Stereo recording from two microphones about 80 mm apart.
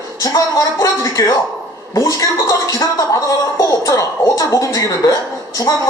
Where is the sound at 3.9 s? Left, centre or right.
Left.